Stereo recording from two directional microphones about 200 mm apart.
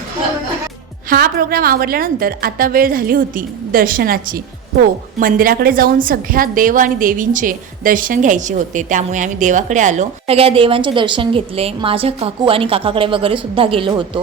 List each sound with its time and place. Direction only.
1.1 s a woman's voice: 50° right (ahead or behind); by 14.2 s 25° right (ahead or behind)